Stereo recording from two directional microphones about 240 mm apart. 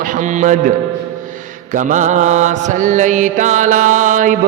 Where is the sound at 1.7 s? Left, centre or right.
Right.